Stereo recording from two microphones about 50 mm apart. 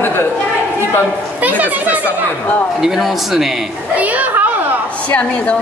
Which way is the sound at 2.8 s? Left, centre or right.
Centre.